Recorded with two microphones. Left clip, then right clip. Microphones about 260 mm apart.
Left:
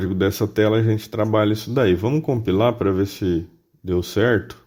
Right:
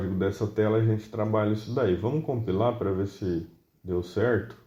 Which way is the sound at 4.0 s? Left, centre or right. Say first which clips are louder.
Left 7 dB; left.